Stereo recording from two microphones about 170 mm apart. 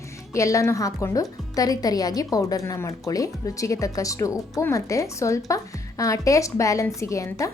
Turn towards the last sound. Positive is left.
turn(degrees=20)  # may be behind; listen again after turning